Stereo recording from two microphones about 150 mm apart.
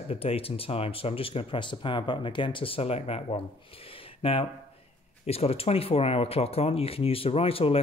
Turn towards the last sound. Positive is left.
turn(degrees=40)  # may be behind; listen again after turning